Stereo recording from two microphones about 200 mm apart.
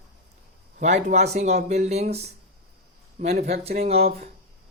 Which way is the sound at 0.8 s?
35° right (ahead or behind).